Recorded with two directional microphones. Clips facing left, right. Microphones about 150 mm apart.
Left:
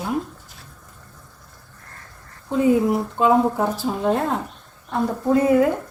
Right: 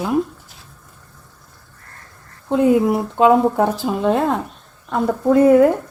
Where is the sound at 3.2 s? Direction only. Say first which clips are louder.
Right 5 dB; 75° right (ahead or behind).